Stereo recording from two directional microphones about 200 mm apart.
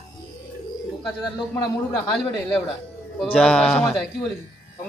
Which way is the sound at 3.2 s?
5° left (ahead or behind).